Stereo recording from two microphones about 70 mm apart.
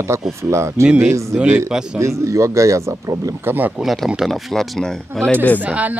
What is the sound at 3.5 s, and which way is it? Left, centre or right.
Speech, right.